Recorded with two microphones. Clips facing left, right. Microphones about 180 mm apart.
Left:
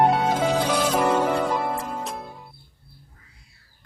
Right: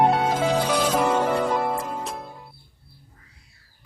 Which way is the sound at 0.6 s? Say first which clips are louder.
Even; 10° right (ahead or behind).